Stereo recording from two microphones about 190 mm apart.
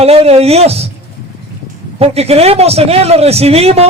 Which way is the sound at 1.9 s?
35° right (ahead or behind).